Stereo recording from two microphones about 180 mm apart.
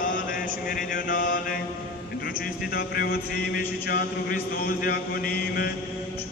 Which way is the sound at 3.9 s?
55° left (ahead or behind).